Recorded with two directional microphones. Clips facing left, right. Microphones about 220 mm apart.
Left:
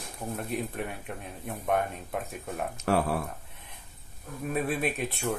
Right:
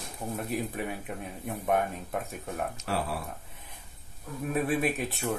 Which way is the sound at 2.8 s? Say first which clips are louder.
Left 6 dB; 50° left (ahead or behind).